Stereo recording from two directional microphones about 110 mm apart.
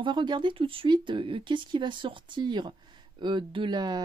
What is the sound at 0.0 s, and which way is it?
Speech, 45° right (ahead or behind).